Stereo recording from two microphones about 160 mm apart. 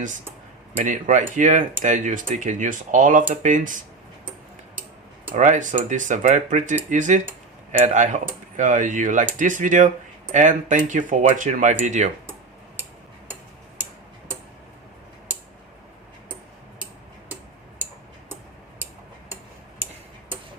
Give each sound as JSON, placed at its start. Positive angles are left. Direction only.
{"t": 0.9, "sound": "speech", "side_deg": -50}
{"t": 5.3, "sound": "speech", "side_deg": -50}